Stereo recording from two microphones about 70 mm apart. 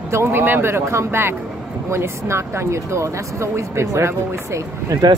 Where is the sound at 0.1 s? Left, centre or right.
Right.